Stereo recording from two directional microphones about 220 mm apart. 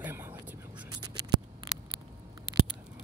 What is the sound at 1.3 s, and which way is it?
Scissors, 20° right (ahead or behind).